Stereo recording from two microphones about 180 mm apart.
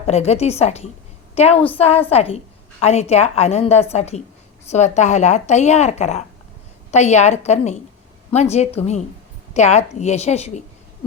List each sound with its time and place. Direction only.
0.0 s a woman's voice: 35° left (ahead or behind)